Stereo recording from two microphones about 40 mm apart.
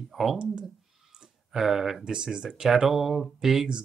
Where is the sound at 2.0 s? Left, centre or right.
Right.